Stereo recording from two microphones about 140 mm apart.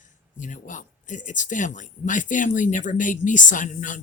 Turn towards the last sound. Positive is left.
turn(degrees=65)  # may be behind; listen again after turning